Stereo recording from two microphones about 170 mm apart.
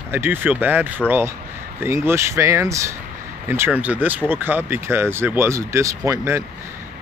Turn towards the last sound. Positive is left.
turn(degrees=-15)  # may be behind; listen again after turning